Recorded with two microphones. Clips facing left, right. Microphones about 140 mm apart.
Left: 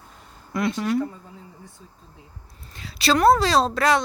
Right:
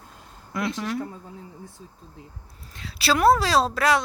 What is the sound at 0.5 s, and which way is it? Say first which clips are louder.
Speech: left 4 dB; centre (ahead or behind).